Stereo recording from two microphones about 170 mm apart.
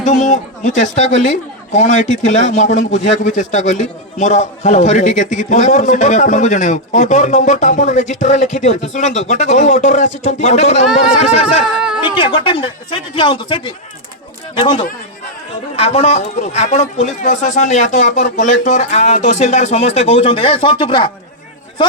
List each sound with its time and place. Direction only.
0.0 s speech: 45° left (ahead or behind)
11.6 s speech: 5° right (ahead or behind)
12.1 s a man's voice: 30° left (ahead or behind)
15.7 s a man's voice: 35° left (ahead or behind)